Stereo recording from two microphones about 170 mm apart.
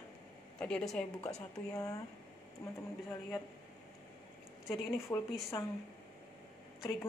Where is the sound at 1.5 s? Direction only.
20° left (ahead or behind).